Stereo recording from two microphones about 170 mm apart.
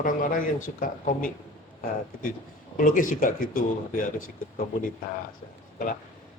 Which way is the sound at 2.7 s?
50° left (ahead or behind).